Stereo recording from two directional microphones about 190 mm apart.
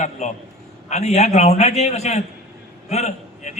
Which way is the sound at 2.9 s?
35° left (ahead or behind).